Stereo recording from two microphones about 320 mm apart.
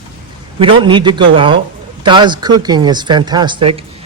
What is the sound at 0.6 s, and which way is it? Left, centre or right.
Speech, centre.